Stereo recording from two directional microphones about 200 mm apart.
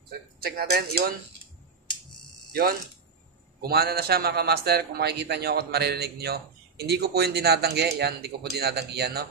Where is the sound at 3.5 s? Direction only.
50° right (ahead or behind).